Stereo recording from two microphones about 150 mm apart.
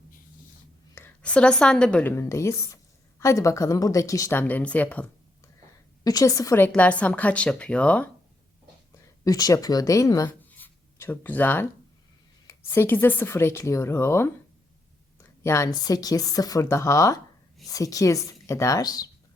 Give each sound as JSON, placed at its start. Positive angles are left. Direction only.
{"t": 0.9, "sound": "a woman's voice", "side_deg": 10}
{"t": 6.1, "sound": "a woman's voice", "side_deg": 25}
{"t": 6.7, "sound": "speech", "side_deg": 10}
{"t": 9.2, "sound": "a woman's voice", "side_deg": 25}
{"t": 10.2, "sound": "writing", "side_deg": 15}
{"t": 12.5, "sound": "speech", "side_deg": 15}
{"t": 15.4, "sound": "a woman's voice", "side_deg": 20}